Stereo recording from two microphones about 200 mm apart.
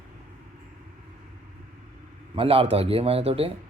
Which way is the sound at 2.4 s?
30° right (ahead or behind).